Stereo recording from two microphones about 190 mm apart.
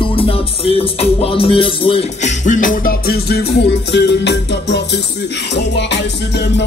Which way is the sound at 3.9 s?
60° left (ahead or behind).